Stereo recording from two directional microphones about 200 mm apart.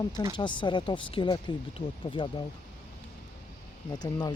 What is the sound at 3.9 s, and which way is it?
Speech, 20° left (ahead or behind).